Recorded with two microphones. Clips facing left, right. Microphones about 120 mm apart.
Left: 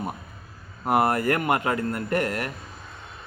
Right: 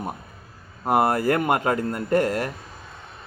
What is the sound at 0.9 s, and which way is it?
Speech, 20° right (ahead or behind).